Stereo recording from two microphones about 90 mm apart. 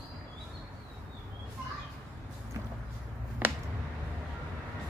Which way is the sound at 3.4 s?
20° right (ahead or behind).